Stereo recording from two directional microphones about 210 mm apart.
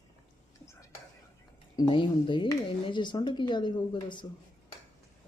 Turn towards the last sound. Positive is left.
turn(degrees=20)  # may be behind; listen again after turning